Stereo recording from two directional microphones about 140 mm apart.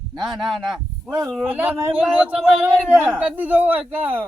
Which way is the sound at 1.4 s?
15° right (ahead or behind).